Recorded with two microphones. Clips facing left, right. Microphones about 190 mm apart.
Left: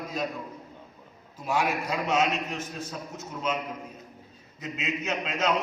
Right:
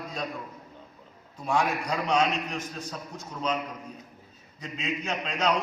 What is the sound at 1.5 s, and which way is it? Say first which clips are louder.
Speech: right 1 dB; 5° left (ahead or behind).